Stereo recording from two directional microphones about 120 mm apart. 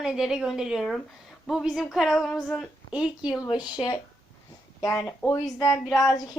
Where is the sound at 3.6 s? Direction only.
40° left (ahead or behind).